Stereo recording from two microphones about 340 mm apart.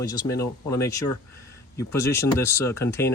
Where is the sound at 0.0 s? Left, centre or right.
Centre.